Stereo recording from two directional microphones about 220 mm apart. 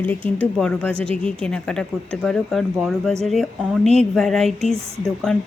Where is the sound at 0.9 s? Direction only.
25° right (ahead or behind).